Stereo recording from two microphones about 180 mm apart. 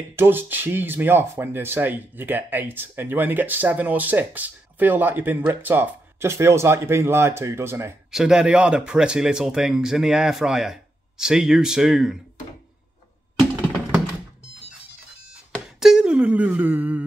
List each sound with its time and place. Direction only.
0.1 s speech: 10° right (ahead or behind)
8.1 s speech: 5° right (ahead or behind)
15.6 s wail: 5° right (ahead or behind)